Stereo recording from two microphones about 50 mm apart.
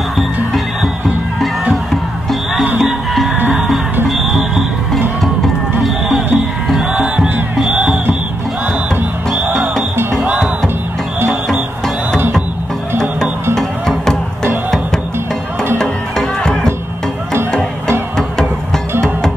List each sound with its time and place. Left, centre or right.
1.0 s music: centre
10.2 s music: right
13.6 s music: centre
15.8 s music: centre